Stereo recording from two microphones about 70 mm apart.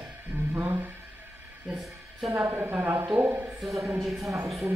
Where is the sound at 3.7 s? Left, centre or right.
Right.